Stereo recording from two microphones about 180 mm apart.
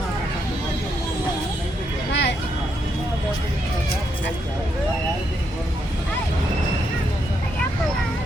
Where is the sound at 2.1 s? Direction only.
75° left (ahead or behind).